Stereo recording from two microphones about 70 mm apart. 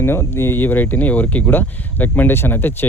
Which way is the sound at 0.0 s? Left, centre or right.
Left.